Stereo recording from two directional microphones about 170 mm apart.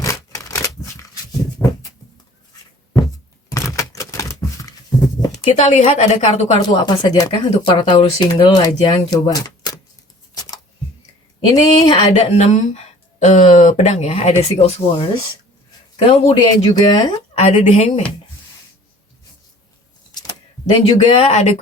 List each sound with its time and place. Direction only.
0.0 s a sound: 20° left (ahead or behind)
3.5 s a sound: 20° left (ahead or behind)
5.5 s a woman's voice: 40° left (ahead or behind)
6.6 s speech: 25° left (ahead or behind)
11.6 s speech: 25° left (ahead or behind)
12.1 s speech: 40° left (ahead or behind)
17.3 s a woman's voice: 40° left (ahead or behind)
20.7 s speech: 35° left (ahead or behind)